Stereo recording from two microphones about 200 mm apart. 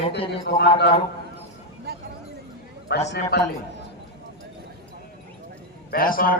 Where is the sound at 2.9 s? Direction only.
55° left (ahead or behind).